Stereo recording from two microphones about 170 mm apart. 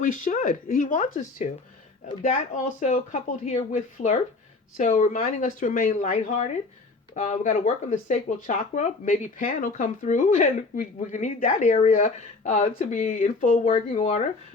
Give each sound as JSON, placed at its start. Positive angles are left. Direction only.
{"t": 0.0, "sound": "speech", "side_deg": 50}